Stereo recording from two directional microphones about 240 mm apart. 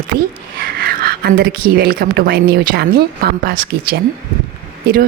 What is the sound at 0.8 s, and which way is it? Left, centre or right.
Speech, right.